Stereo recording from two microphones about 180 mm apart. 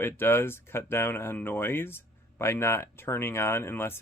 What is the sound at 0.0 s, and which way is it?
Speech, 10° left (ahead or behind).